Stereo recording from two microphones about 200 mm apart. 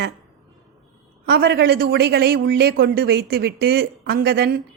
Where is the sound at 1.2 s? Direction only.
55° right (ahead or behind).